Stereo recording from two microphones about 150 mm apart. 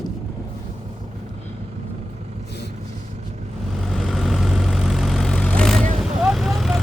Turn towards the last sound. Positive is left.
turn(degrees=0)  # may be behind; listen again after turning